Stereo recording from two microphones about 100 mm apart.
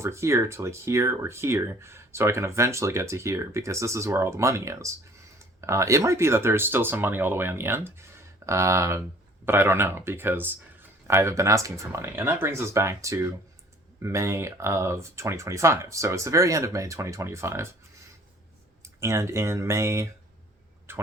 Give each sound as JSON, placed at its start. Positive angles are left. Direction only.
{"t": 0.0, "sound": "speech", "side_deg": -30}
{"t": 18.8, "sound": "speech", "side_deg": -30}
{"t": 20.9, "sound": "a sound", "side_deg": -25}